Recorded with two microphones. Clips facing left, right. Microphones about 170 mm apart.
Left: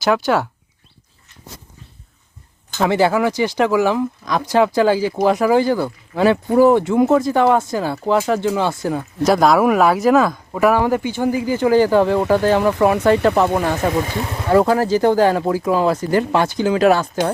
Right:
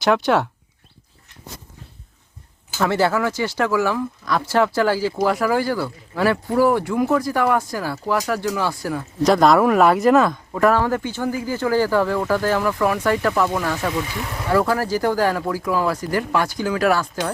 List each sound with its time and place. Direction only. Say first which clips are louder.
0.0 s speech: left 1 dB; centre (ahead or behind)
2.8 s speech: left 3 dB; 15° left (ahead or behind)
9.2 s speech: left 1 dB; 5° left (ahead or behind); by 13.5 s 25° left (ahead or behind)
13.9 s speech: left 5 dB; 45° left (ahead or behind)
14.2 s speech: left 4 dB; 25° left (ahead or behind)